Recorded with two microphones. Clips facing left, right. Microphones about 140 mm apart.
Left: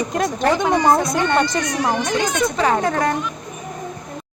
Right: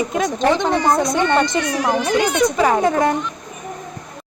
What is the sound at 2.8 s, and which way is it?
Speech, 20° right (ahead or behind).